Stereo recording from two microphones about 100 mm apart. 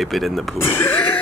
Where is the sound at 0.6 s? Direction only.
25° left (ahead or behind).